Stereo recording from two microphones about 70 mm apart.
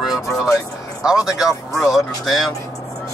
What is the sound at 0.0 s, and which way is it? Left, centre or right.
Vehicle, centre.